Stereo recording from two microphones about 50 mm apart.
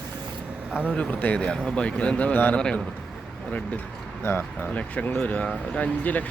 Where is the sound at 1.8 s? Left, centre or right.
Left.